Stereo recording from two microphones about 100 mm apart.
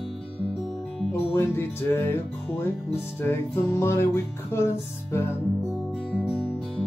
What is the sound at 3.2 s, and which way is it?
Music, 25° left (ahead or behind).